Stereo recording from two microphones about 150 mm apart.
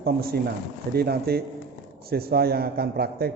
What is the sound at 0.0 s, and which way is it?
A man's voice, 90° right.